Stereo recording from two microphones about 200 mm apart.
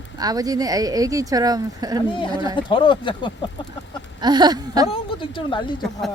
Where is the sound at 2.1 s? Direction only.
25° left (ahead or behind).